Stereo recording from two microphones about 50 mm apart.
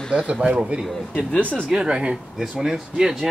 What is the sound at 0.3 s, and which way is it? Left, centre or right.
Speech, right.